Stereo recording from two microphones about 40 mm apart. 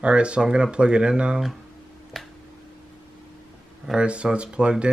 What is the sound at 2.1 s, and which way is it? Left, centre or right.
Finger snapping, centre.